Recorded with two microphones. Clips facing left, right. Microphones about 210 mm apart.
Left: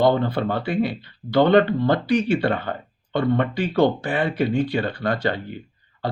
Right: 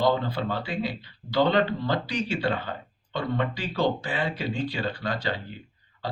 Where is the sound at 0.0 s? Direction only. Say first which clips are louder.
Left 6 dB; 55° left (ahead or behind).